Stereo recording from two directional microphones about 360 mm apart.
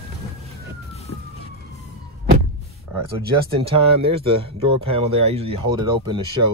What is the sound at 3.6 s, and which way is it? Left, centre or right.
Speech, centre.